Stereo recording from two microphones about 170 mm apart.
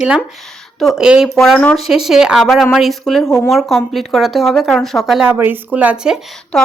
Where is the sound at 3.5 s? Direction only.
Centre (ahead or behind).